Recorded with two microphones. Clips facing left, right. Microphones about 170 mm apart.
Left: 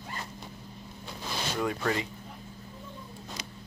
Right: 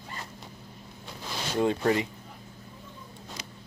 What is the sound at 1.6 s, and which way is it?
Speech, 25° right (ahead or behind).